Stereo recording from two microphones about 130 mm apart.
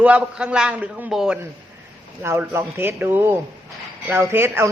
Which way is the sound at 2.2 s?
20° right (ahead or behind).